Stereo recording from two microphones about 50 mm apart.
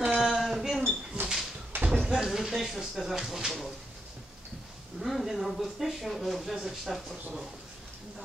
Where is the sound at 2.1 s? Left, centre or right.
Centre.